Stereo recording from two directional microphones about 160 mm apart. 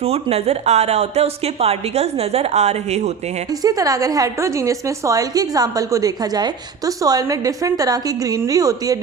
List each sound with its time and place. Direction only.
0.0 s a woman's voice: 40° right (ahead or behind)
3.6 s a woman's voice: 25° right (ahead or behind)